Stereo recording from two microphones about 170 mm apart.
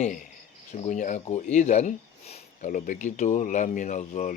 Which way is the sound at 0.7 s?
45° left (ahead or behind).